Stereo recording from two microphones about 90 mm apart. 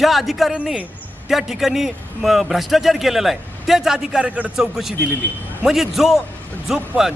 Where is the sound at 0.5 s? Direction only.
15° right (ahead or behind).